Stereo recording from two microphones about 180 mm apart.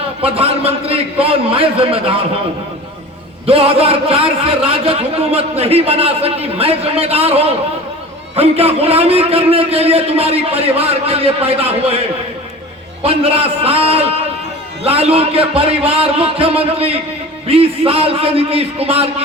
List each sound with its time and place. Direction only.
0.2 s a man's voice: 30° right (ahead or behind)
3.4 s a man's voice: 35° right (ahead or behind)
13.6 s a man's voice: 35° right (ahead or behind)